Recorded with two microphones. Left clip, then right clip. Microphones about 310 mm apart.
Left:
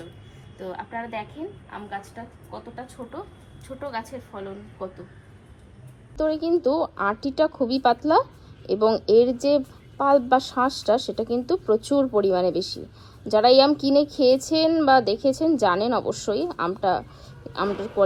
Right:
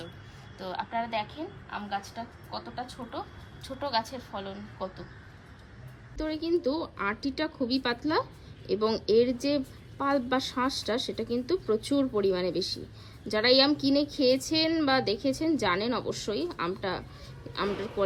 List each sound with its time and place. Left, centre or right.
0.6 s a woman's voice: centre
6.1 s a woman's voice: centre